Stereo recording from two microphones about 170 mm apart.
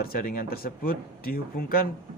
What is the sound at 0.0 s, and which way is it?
Speech, 60° left (ahead or behind).